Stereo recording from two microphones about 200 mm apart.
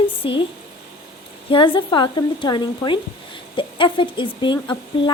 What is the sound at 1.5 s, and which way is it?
Speech, 25° left (ahead or behind).